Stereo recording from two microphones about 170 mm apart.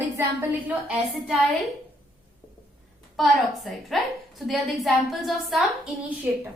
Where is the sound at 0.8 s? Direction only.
5° right (ahead or behind).